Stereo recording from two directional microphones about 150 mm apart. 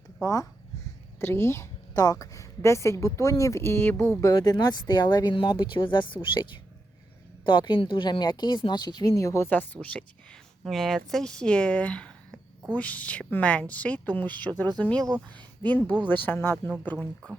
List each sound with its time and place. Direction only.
0.2 s a woman's voice: 20° left (ahead or behind)
4.2 s a woman's voice: 25° left (ahead or behind); by 15.0 s 10° left (ahead or behind)
15.0 s speech: 25° right (ahead or behind)
16.0 s a woman's voice: 15° left (ahead or behind)